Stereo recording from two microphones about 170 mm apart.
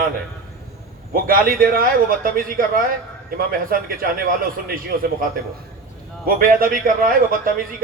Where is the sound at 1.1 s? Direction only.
55° right (ahead or behind).